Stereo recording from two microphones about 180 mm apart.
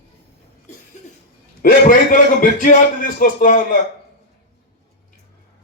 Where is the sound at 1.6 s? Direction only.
50° left (ahead or behind).